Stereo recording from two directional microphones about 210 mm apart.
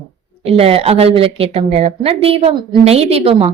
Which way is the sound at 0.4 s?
25° right (ahead or behind).